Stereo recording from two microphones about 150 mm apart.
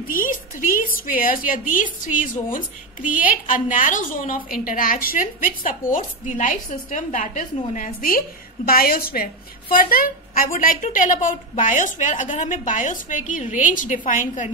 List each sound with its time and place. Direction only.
0.1 s a woman's voice: 65° left (ahead or behind)
8.6 s a woman's voice: 85° left
9.8 s a woman's voice: 70° left (ahead or behind)